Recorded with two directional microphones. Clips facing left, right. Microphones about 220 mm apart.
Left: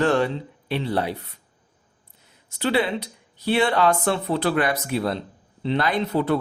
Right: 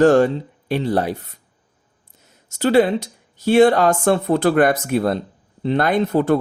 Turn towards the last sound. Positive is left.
turn(degrees=-50)  # may be behind; listen again after turning